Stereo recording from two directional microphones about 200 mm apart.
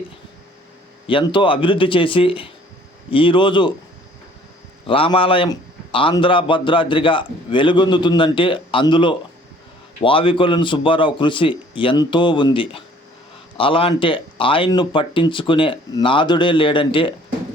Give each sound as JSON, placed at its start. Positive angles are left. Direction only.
{"t": 1.0, "sound": "a man's voice", "side_deg": 25}
{"t": 4.9, "sound": "a man's voice", "side_deg": 25}